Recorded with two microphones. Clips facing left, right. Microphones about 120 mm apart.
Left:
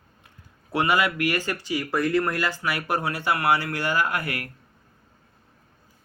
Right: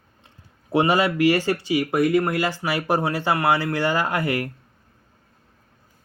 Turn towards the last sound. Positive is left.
turn(degrees=-30)  # may be behind; listen again after turning